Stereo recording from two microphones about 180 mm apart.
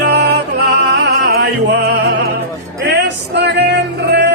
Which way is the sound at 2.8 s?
70° right (ahead or behind).